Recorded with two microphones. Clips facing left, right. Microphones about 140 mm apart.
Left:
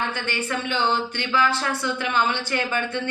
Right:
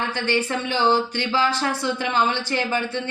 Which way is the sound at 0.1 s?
35° right (ahead or behind).